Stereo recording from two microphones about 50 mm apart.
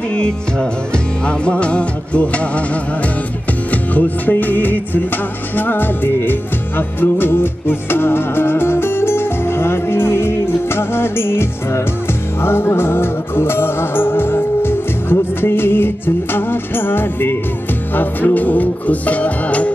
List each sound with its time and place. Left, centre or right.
0.1 s music: centre; by 17.4 s left
17.9 s music: left